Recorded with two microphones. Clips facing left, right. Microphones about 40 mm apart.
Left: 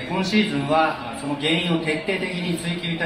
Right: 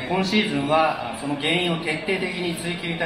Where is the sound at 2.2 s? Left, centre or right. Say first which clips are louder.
Even; right.